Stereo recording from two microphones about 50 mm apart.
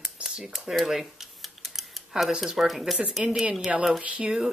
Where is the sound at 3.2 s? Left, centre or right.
Centre.